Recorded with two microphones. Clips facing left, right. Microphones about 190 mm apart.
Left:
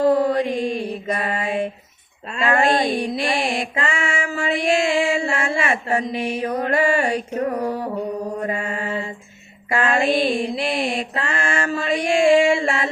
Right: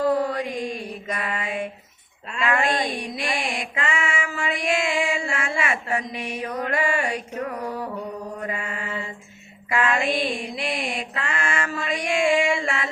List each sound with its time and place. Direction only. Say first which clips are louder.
0.0 s mantra: left 5 dB; 30° left (ahead or behind)